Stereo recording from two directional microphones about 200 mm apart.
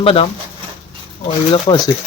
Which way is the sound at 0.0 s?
25° left (ahead or behind).